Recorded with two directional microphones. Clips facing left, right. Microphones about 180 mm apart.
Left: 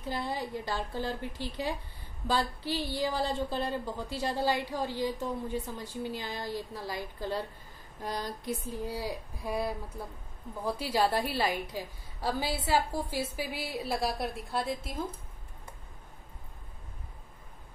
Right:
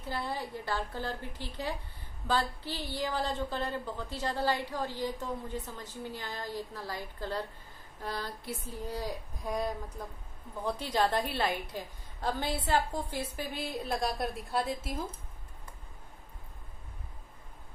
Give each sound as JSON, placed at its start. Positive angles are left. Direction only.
{"t": 0.1, "sound": "a woman's voice", "side_deg": 15}
{"t": 1.4, "sound": "speech", "side_deg": -15}
{"t": 2.2, "sound": "a woman's voice", "side_deg": 10}